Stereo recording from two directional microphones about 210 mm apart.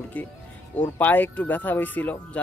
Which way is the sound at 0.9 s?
10° left (ahead or behind).